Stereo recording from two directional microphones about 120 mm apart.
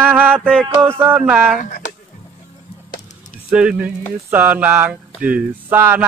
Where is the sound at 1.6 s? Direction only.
90° left.